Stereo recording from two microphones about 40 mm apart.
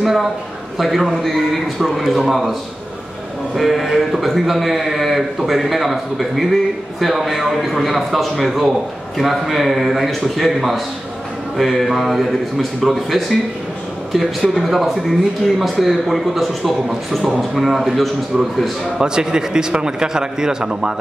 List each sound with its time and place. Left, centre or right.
0.0 s a man's voice: centre
3.5 s a man's voice: centre
18.9 s a man's voice: centre